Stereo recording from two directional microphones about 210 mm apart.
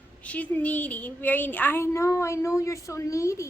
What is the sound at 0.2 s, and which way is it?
A woman's voice, 5° left (ahead or behind).